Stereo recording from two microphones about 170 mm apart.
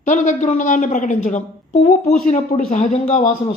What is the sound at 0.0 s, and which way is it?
A woman's voice, 45° left (ahead or behind).